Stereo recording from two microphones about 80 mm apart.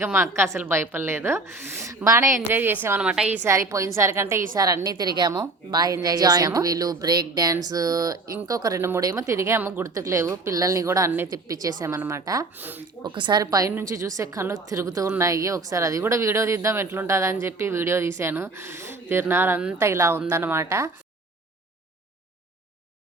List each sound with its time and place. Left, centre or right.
0.0 s a woman's voice: right
3.0 s a woman's voice: centre
3.4 s speech: right
4.6 s a woman's voice: right
9.6 s a woman's voice: right
9.8 s speech: right
10.5 s speech: right
11.9 s speech: right
12.2 s speech: right
12.5 s a woman's voice: right
13.0 s a woman's voice: right
13.4 s speech: right